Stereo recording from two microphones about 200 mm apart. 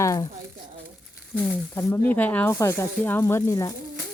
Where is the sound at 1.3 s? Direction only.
10° left (ahead or behind).